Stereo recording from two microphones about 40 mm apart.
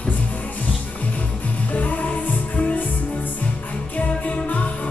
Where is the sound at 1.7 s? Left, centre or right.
Left.